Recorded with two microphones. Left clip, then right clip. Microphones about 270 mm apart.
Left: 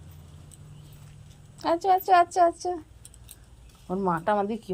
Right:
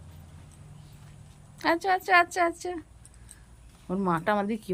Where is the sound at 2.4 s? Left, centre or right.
Centre.